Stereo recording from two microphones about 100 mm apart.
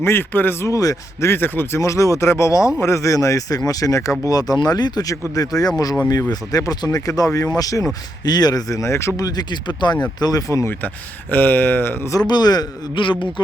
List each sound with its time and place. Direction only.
0.0 s speech: 20° left (ahead or behind)
0.7 s speech: 35° left (ahead or behind)
10.7 s speech: 20° left (ahead or behind)
12.3 s speech: 40° left (ahead or behind)
13.0 s a man's voice: 55° left (ahead or behind)